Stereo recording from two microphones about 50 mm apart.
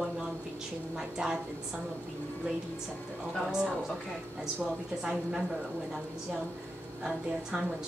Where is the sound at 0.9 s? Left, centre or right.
Centre.